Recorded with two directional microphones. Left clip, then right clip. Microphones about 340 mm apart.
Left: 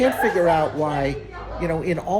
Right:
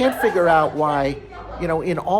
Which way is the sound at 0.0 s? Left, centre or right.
Centre.